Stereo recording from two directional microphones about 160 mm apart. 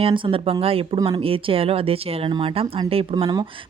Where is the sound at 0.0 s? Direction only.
35° right (ahead or behind).